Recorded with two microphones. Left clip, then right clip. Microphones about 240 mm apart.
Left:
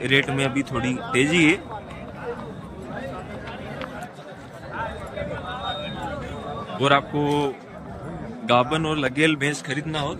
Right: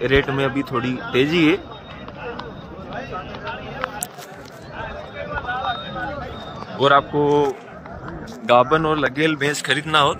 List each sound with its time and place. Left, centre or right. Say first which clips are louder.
0.0 s speech: right 3 dB; centre
6.8 s a man's voice: right 5 dB; centre